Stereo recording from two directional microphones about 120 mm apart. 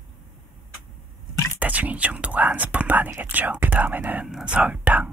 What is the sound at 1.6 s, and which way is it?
Speech, 15° right (ahead or behind).